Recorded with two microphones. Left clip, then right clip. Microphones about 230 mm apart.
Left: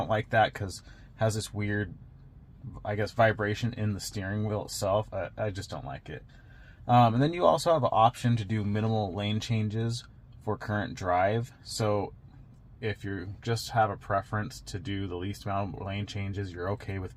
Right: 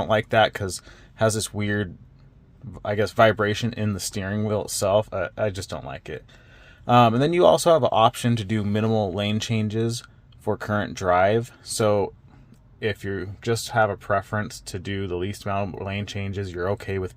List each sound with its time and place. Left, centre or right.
0.0 s speech: right